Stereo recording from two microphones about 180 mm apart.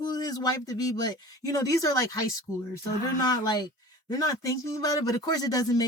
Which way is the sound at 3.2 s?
20° left (ahead or behind).